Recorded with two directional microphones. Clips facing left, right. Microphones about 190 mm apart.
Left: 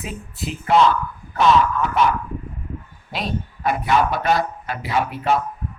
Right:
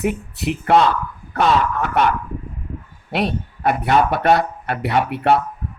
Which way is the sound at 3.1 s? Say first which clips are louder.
Right 5 dB; 65° right (ahead or behind).